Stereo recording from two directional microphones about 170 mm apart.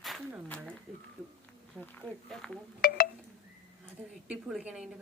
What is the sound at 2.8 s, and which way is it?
Speech, 60° left (ahead or behind).